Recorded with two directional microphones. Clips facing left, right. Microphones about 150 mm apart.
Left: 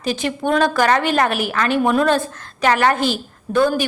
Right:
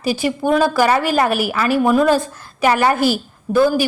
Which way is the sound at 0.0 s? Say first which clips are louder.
Right 3 dB; 10° right (ahead or behind).